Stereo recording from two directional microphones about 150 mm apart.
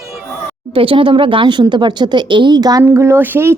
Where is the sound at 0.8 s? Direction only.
35° right (ahead or behind); by 3.6 s 15° right (ahead or behind).